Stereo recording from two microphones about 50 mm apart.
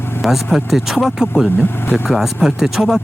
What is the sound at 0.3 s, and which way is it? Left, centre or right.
Speech, centre.